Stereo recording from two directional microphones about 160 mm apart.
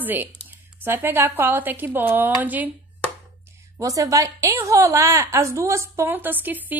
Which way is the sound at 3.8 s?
20° right (ahead or behind).